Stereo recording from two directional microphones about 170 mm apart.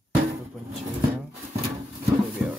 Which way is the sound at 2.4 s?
5° right (ahead or behind).